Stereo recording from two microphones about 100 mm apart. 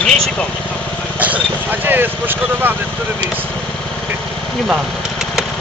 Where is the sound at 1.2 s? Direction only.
15° right (ahead or behind).